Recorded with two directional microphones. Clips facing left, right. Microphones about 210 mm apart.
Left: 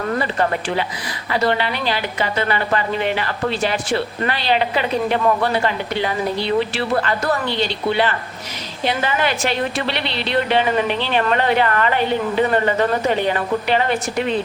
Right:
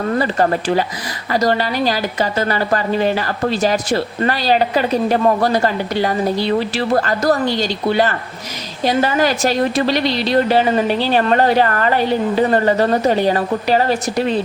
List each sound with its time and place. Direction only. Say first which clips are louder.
0.2 s a woman's voice: right 4 dB; 40° right (ahead or behind)